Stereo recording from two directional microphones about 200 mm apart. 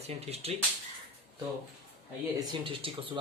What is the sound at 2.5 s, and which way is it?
Speech, 25° right (ahead or behind).